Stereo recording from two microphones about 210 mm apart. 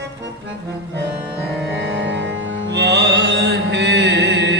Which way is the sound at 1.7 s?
60° right (ahead or behind).